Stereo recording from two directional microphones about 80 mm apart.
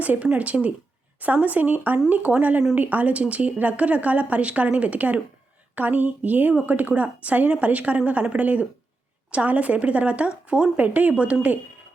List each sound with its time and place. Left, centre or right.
0.0 s speech: centre